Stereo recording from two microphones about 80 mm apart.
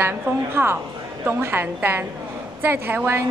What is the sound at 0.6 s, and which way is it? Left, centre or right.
A woman's voice, right.